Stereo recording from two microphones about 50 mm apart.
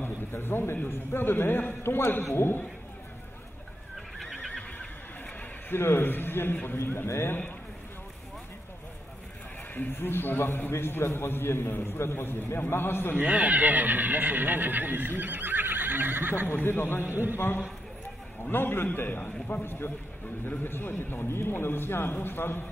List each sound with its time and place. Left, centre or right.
0.0 s a sound: left
0.8 s a man's voice: left
4.2 s neigh: centre
5.7 s a man's voice: left
7.1 s speech: left
9.8 s a man's voice: left
13.1 s speech: right
16.4 s a man's voice: left
17.1 s speech: right
17.4 s a man's voice: left
18.9 s a man's voice: left
19.6 s a man's voice: left